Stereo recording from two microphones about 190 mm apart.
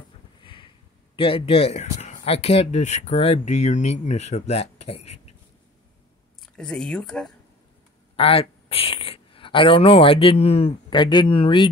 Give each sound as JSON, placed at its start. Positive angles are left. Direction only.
{"t": 0.4, "sound": "a sound", "side_deg": 25}
{"t": 1.1, "sound": "speech", "side_deg": 30}
{"t": 6.4, "sound": "speech", "side_deg": 5}
{"t": 8.2, "sound": "speech", "side_deg": 30}